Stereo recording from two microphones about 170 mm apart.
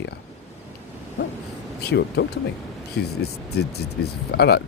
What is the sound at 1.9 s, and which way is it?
Speech, 75° left (ahead or behind).